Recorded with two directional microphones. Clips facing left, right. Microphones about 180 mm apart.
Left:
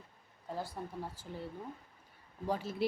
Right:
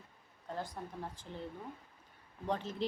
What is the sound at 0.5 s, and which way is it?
Speech, 5° left (ahead or behind).